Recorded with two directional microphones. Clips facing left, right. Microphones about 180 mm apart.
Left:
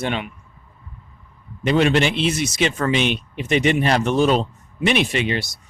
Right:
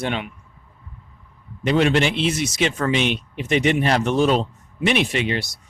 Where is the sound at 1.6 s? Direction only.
20° left (ahead or behind).